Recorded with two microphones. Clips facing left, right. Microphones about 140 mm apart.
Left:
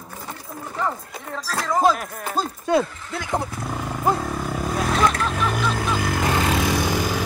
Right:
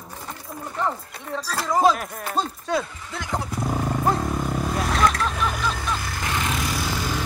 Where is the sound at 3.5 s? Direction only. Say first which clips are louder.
Right 4 dB; 20° right (ahead or behind).